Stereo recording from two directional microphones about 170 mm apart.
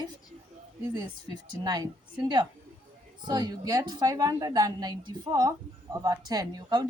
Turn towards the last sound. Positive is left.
turn(degrees=-25)  # may be behind; listen again after turning